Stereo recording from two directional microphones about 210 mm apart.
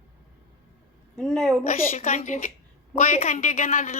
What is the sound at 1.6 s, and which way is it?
A woman's voice, 35° left (ahead or behind).